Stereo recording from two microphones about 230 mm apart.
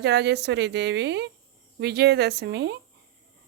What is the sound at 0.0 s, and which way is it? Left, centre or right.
Speech, right.